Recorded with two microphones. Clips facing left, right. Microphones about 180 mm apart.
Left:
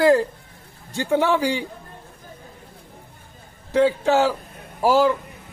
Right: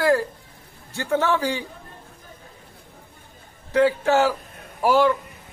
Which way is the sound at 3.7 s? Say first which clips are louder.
Left 1 dB; 15° left (ahead or behind).